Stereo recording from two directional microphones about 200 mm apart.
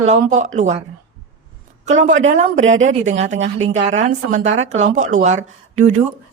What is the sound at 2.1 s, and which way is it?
Speech, 75° right (ahead or behind).